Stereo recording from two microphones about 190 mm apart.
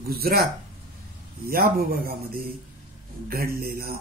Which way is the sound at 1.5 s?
50° right (ahead or behind).